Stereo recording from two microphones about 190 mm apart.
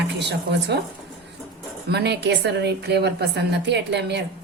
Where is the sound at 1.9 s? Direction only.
60° right (ahead or behind).